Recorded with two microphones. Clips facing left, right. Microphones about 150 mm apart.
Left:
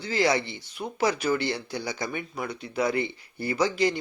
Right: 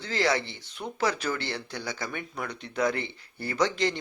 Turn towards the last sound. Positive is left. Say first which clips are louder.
# left 2 dB
turn(degrees=10)  # may be behind; listen again after turning